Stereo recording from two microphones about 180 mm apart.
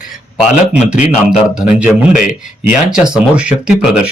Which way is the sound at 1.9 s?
45° left (ahead or behind).